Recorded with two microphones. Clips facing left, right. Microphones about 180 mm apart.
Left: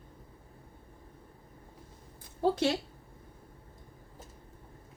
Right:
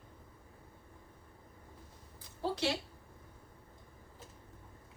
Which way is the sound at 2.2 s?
50° left (ahead or behind).